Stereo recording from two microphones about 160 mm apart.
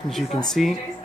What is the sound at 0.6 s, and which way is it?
Speech, centre (ahead or behind).